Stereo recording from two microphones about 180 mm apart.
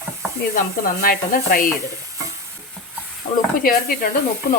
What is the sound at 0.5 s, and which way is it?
Speech, 50° left (ahead or behind).